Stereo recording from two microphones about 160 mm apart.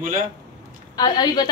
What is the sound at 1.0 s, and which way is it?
Speech, 25° left (ahead or behind).